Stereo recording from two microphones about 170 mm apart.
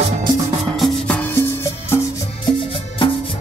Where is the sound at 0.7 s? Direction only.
Centre (ahead or behind).